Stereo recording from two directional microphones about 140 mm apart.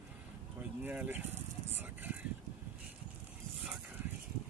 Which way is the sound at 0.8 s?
10° right (ahead or behind).